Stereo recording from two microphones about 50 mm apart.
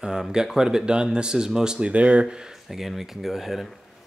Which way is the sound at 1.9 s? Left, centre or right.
Right.